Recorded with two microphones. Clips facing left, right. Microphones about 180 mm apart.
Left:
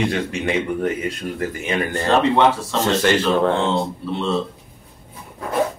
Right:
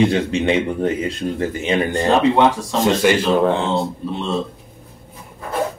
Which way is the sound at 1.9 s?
15° right (ahead or behind).